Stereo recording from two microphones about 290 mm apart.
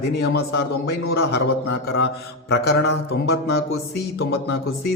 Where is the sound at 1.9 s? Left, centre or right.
Left.